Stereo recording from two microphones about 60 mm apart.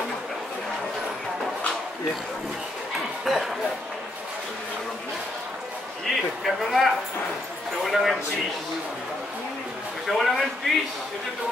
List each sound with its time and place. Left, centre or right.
3.3 s speech: centre
6.0 s speech: centre
10.0 s speech: centre